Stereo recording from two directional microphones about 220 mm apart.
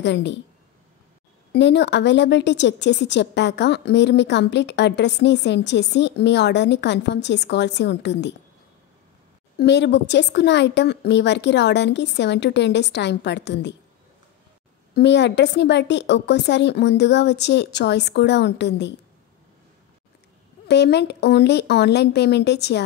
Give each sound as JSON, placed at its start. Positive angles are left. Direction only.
{"t": 0.0, "sound": "a woman's voice", "side_deg": 55}
{"t": 1.5, "sound": "a woman's voice", "side_deg": 50}
{"t": 9.6, "sound": "a woman's voice", "side_deg": 50}
{"t": 15.0, "sound": "a woman's voice", "side_deg": 50}
{"t": 20.6, "sound": "a woman's voice", "side_deg": 50}